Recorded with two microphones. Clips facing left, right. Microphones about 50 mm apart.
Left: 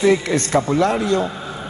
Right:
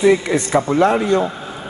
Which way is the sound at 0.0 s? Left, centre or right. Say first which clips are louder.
Right 2 dB; centre.